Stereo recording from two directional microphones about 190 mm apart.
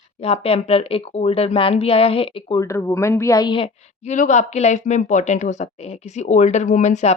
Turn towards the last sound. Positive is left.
turn(degrees=35)  # may be behind; listen again after turning